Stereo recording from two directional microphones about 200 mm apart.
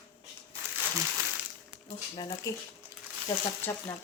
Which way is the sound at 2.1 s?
20° left (ahead or behind).